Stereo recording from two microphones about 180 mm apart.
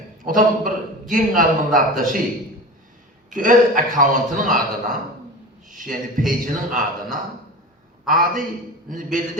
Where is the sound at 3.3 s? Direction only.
45° right (ahead or behind).